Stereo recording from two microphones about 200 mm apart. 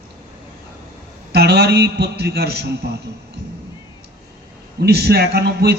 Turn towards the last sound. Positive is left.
turn(degrees=-55)  # may be behind; listen again after turning